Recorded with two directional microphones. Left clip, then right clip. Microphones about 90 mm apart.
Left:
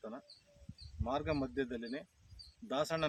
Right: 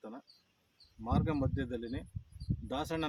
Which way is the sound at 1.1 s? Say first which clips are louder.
Right 1 dB; 40° left (ahead or behind).